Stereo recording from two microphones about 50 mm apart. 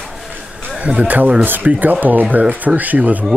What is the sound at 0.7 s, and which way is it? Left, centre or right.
Speech, right.